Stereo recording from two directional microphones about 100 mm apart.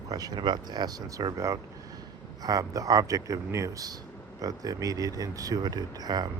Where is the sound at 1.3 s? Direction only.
30° right (ahead or behind).